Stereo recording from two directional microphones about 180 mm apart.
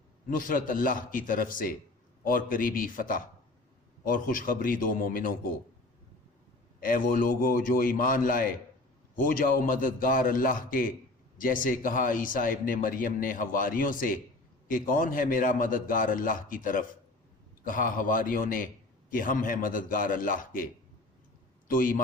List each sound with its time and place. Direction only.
0.3 s a man's voice: 50° left (ahead or behind)
6.7 s a man's voice: 50° left (ahead or behind)
21.7 s a man's voice: 50° left (ahead or behind)